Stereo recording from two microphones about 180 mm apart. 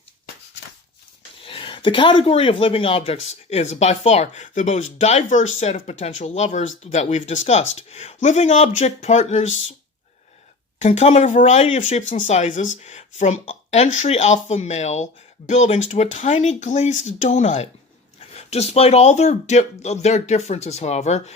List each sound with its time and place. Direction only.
1.4 s speech: 30° left (ahead or behind)
10.8 s speech: 40° left (ahead or behind)